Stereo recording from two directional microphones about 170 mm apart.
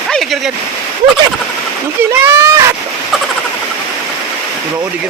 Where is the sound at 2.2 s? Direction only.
15° right (ahead or behind).